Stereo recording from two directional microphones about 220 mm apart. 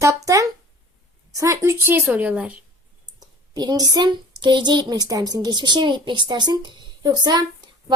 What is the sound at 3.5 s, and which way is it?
A woman's voice, 15° right (ahead or behind).